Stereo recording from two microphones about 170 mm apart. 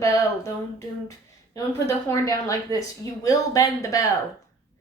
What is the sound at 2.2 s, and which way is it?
A woman's voice, 20° left (ahead or behind).